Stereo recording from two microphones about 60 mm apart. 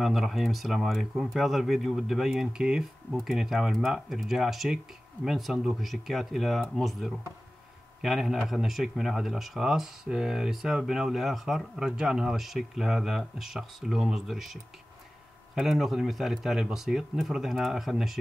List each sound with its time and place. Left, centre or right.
0.0 s speech: centre